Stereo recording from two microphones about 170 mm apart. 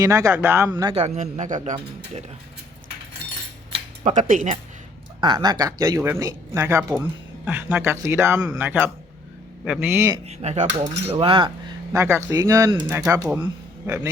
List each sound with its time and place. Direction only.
0.0 s speech: 20° right (ahead or behind)
0.9 s speech: 40° right (ahead or behind)
4.0 s speech: 45° right (ahead or behind)
5.2 s speech: 25° right (ahead or behind)
10.2 s speech: 40° right (ahead or behind)
10.8 s speech: 30° right (ahead or behind)
11.9 s speech: 15° right (ahead or behind)